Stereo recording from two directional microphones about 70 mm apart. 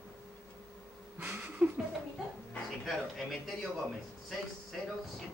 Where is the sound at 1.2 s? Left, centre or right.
Right.